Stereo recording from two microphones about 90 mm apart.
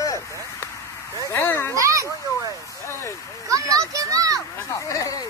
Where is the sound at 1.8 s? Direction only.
35° right (ahead or behind).